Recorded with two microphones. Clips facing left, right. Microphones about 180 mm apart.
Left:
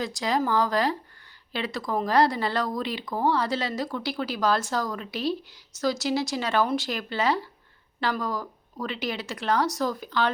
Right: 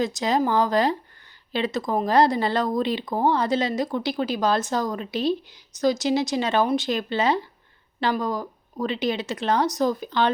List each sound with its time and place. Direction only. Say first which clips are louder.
0.0 s speech: right 4 dB; 20° right (ahead or behind)